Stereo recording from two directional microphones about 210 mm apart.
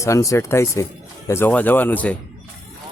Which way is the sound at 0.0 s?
15° left (ahead or behind).